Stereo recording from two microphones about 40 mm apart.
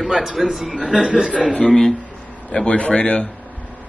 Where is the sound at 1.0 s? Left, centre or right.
Right.